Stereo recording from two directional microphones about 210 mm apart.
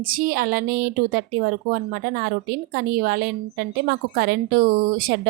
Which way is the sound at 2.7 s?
45° right (ahead or behind).